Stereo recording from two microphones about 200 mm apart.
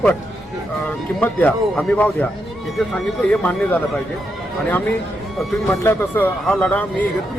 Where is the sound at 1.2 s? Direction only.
10° left (ahead or behind).